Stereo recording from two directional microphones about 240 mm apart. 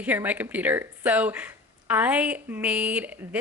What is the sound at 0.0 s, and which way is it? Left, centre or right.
A woman's voice, centre.